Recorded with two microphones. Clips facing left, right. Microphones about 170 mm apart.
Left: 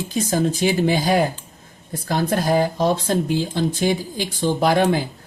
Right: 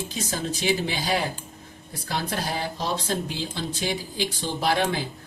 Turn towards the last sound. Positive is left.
turn(degrees=50)  # may be behind; listen again after turning